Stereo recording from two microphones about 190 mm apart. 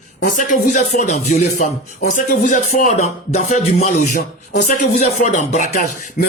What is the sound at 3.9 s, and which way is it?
Speech, 45° left (ahead or behind).